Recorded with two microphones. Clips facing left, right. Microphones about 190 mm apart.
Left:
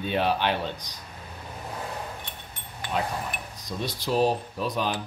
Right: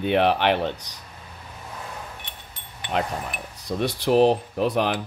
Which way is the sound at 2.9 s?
70° right (ahead or behind).